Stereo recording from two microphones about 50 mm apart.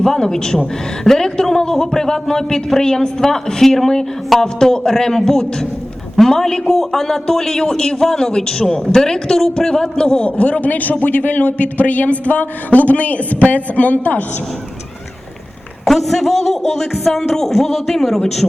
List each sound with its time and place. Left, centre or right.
0.0 s a man's voice: centre
10.2 s a man's voice: left
15.8 s a man's voice: centre